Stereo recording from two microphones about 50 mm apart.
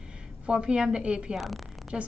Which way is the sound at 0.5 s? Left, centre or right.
Centre.